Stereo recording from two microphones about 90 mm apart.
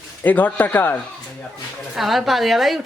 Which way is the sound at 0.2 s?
20° left (ahead or behind).